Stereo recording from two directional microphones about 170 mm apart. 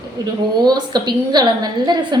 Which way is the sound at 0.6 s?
25° right (ahead or behind).